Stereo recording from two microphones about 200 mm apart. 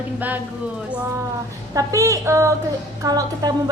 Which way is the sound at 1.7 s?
15° right (ahead or behind).